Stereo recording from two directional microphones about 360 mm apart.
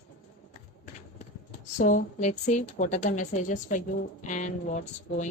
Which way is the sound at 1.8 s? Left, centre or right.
Left.